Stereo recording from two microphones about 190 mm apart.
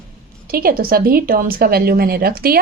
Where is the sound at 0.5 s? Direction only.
50° right (ahead or behind).